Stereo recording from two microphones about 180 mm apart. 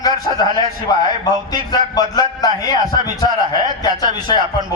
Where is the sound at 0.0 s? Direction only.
20° left (ahead or behind).